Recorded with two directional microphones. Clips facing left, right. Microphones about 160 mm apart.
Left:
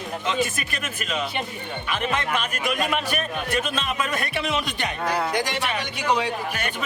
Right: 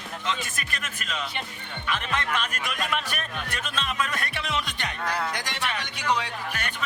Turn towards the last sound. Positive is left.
turn(degrees=10)  # may be behind; listen again after turning